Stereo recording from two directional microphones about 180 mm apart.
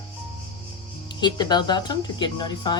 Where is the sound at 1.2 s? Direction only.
25° left (ahead or behind).